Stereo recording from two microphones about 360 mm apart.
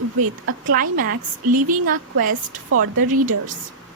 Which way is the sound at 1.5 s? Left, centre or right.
Right.